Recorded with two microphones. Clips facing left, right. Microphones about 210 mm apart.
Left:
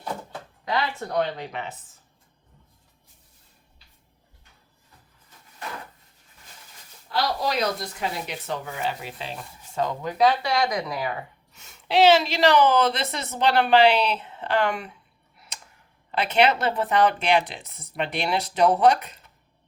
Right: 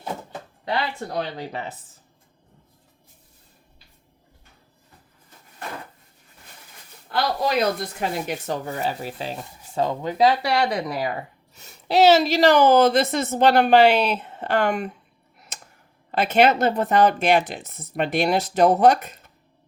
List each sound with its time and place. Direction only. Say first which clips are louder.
1.4 s speech: right 2 dB; 35° right (ahead or behind)
7.1 s a woman's voice: right 3 dB; 55° right (ahead or behind); by 9.4 s 40° right (ahead or behind)
9.4 s a woman's voice: right 2 dB; 30° right (ahead or behind); by 14.9 s 45° right (ahead or behind)
16.1 s a woman's voice: right 3 dB; 45° right (ahead or behind)